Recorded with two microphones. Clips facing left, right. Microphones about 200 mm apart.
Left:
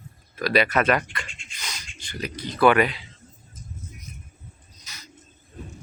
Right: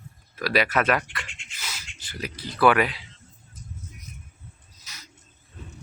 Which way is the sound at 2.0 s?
5° right (ahead or behind).